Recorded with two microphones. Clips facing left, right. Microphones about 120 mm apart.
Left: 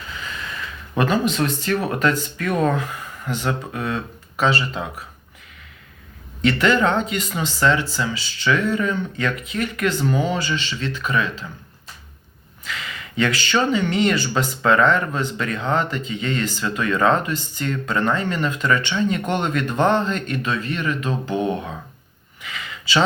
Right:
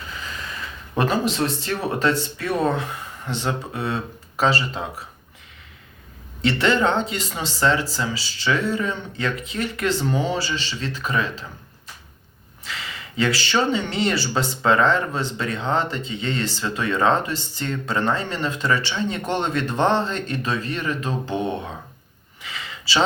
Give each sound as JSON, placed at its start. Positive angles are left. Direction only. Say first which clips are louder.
{"t": 0.9, "sound": "speech", "louder": "left 2 dB", "side_deg": -35}
{"t": 6.4, "sound": "speech", "louder": "left 2 dB", "side_deg": -30}
{"t": 12.6, "sound": "speech", "louder": "left 2 dB", "side_deg": -30}
{"t": 22.4, "sound": "a sound", "louder": "left 1 dB", "side_deg": -30}